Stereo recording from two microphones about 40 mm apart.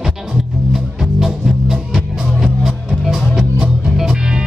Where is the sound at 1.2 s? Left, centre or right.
Centre.